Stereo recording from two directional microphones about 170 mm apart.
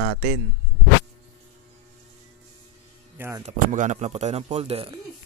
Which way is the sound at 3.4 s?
45° right (ahead or behind).